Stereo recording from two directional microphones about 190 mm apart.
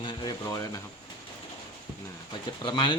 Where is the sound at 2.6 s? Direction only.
25° left (ahead or behind).